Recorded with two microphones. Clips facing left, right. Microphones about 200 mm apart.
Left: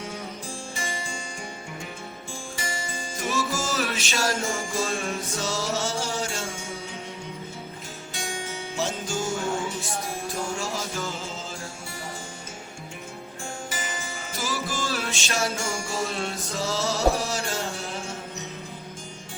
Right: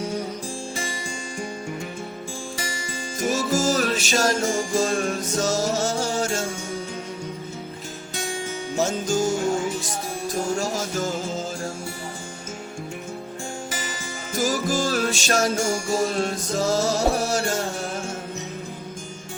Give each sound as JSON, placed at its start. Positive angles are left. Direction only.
{"t": 3.5, "sound": "music", "side_deg": -40}
{"t": 8.7, "sound": "music", "side_deg": -45}
{"t": 14.3, "sound": "music", "side_deg": -45}